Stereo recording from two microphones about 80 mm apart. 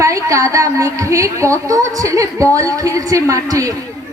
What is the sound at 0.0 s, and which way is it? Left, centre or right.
Speech, right.